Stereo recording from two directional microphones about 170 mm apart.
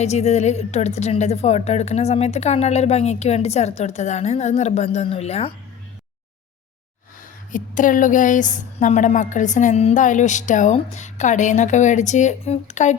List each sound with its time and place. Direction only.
0.0 s speech: 40° left (ahead or behind)
7.5 s a woman's voice: 50° left (ahead or behind)